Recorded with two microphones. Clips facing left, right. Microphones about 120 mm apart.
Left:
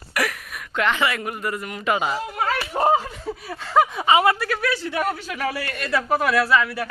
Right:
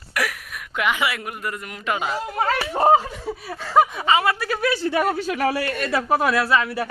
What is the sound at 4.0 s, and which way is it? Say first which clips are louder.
Speech: left 2 dB; 15° left (ahead or behind).